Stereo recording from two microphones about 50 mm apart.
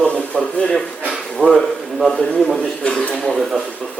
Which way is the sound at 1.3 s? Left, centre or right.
Centre.